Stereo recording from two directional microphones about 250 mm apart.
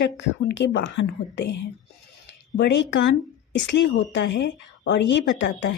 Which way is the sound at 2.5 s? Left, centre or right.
Left.